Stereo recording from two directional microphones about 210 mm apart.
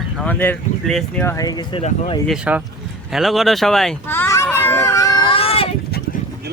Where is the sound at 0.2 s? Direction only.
10° left (ahead or behind); by 2.2 s 25° left (ahead or behind).